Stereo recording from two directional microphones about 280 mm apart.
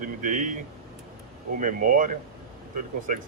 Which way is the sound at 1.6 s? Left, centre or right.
Right.